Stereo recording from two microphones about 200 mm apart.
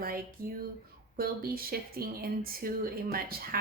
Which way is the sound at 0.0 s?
50° right (ahead or behind).